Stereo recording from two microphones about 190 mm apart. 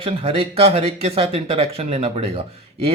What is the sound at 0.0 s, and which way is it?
Speech, 30° right (ahead or behind).